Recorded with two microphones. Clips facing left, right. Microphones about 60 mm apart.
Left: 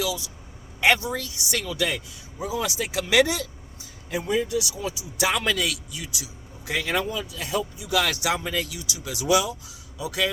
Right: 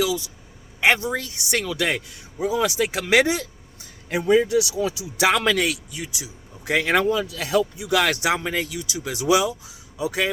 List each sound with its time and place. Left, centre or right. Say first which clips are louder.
0.0 s speech: right 5 dB; right
1.8 s speech: right 3 dB; right
3.8 s a man's voice: right 4 dB; right
5.6 s speech: right 4 dB; right
7.9 s speech: right 4 dB; right
8.5 s speech: right 3 dB; right